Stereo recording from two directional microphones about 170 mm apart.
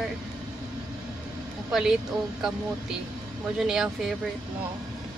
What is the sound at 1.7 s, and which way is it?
Speech, 5° right (ahead or behind).